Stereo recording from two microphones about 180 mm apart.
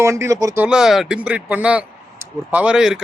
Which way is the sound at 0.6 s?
5° right (ahead or behind).